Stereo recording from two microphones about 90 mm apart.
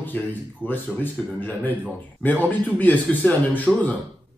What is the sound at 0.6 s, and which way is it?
Speech, 20° left (ahead or behind).